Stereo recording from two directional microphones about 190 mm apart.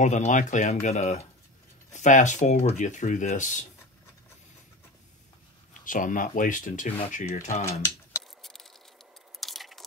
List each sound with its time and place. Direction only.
0.0 s speech: 40° left (ahead or behind)
5.7 s speech: 45° left (ahead or behind)
8.4 s a sound: centre (ahead or behind)